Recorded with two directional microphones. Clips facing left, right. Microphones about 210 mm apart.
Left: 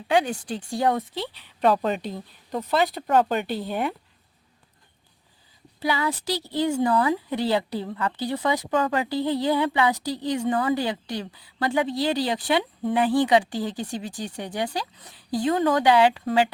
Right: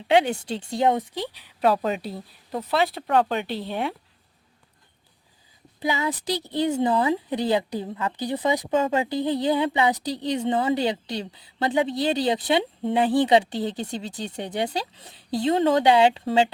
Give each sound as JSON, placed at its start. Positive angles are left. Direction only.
{"t": 0.1, "sound": "a woman's voice", "side_deg": -25}
{"t": 5.8, "sound": "a woman's voice", "side_deg": -20}